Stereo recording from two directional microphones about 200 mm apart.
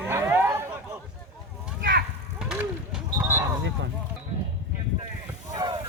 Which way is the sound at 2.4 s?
5° right (ahead or behind).